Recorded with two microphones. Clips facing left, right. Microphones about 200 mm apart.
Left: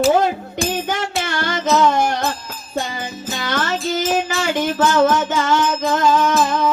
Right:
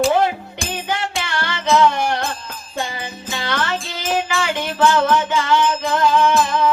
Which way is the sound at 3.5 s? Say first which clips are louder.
Left 4 dB; 45° left (ahead or behind).